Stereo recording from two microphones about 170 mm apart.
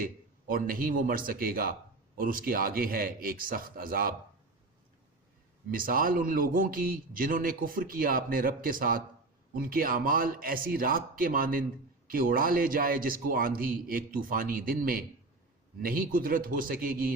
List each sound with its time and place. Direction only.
0.0 s speech: 55° right (ahead or behind)
5.7 s speech: 55° right (ahead or behind)